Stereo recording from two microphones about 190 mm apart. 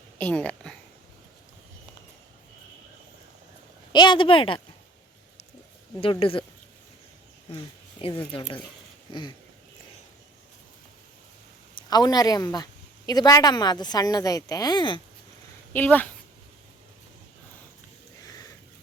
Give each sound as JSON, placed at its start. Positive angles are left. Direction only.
{"t": 0.2, "sound": "speech", "side_deg": 5}
{"t": 3.9, "sound": "a woman's voice", "side_deg": 25}
{"t": 6.0, "sound": "a woman's voice", "side_deg": 30}
{"t": 8.0, "sound": "a woman's voice", "side_deg": 25}
{"t": 11.9, "sound": "a woman's voice", "side_deg": 20}
{"t": 15.7, "sound": "speech", "side_deg": 10}